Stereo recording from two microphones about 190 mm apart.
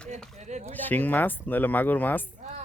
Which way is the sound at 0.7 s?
10° left (ahead or behind).